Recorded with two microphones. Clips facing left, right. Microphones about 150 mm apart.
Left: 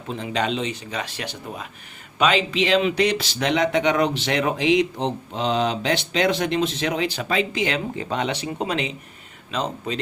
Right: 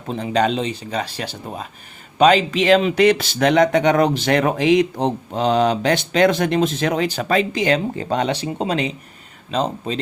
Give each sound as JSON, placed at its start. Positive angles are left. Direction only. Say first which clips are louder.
{"t": 0.1, "sound": "speech", "louder": "right 5 dB", "side_deg": -40}